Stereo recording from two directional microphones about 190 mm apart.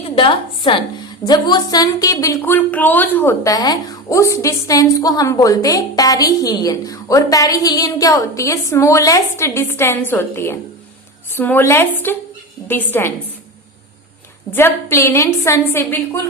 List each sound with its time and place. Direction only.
0.0 s a woman's voice: 25° left (ahead or behind); by 13.1 s 10° left (ahead or behind)
14.5 s a woman's voice: 10° left (ahead or behind)